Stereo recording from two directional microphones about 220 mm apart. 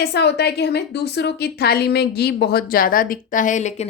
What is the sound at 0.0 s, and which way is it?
A woman's voice, 50° left (ahead or behind).